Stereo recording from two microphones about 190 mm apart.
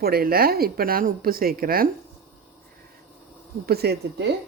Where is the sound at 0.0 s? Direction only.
55° right (ahead or behind).